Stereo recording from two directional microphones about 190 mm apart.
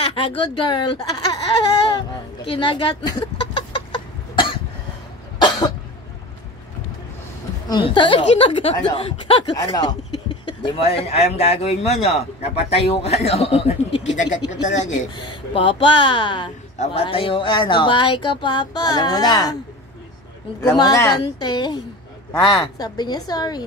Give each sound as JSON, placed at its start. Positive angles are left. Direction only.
{"t": 0.0, "sound": "a sound", "side_deg": 30}
{"t": 0.6, "sound": "speech", "side_deg": 25}
{"t": 2.5, "sound": "speech", "side_deg": 25}
{"t": 3.9, "sound": "cough", "side_deg": 25}
{"t": 7.6, "sound": "a woman's voice", "side_deg": 25}
{"t": 15.1, "sound": "speech", "side_deg": 25}
{"t": 20.6, "sound": "speech", "side_deg": 20}